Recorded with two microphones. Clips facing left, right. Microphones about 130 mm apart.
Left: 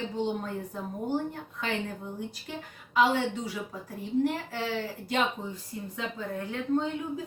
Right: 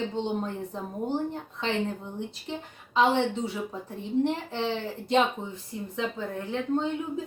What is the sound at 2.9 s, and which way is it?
Speech, 25° right (ahead or behind).